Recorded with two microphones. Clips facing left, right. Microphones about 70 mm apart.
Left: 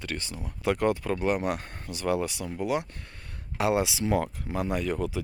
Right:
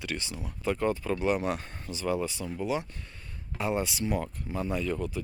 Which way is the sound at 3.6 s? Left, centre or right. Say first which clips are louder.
Left 4 dB; left.